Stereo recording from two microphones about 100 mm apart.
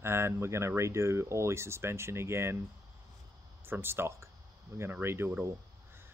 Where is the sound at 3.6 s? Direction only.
25° right (ahead or behind).